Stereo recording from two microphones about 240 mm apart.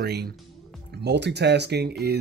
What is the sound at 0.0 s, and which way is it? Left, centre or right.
Speech, right.